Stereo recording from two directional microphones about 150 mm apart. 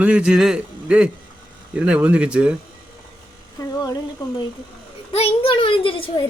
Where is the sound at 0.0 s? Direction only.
5° right (ahead or behind).